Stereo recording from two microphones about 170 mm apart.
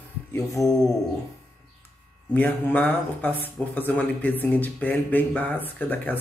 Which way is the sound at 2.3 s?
10° left (ahead or behind).